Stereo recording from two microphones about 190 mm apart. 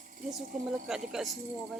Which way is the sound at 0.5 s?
Centre (ahead or behind).